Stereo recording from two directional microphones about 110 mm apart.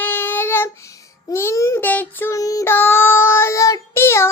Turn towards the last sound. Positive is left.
turn(degrees=25)  # may be behind; listen again after turning